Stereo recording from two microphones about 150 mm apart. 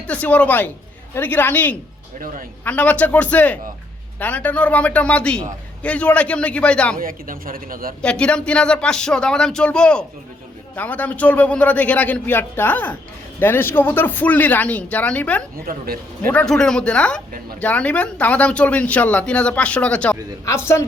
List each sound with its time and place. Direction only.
0.1 s speech: 10° left (ahead or behind)
6.9 s a man's voice: 65° right (ahead or behind)
8.0 s speech: 5° left (ahead or behind)
15.7 s a man's voice: 75° right (ahead or behind)
16.2 s speech: 10° left (ahead or behind)
20.4 s speech: 20° left (ahead or behind)